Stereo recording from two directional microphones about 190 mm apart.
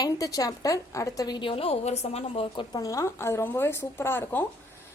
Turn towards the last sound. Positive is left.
turn(degrees=10)  # may be behind; listen again after turning